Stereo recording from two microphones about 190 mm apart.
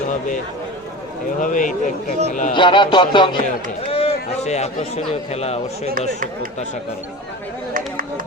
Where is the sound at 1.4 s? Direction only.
45° left (ahead or behind).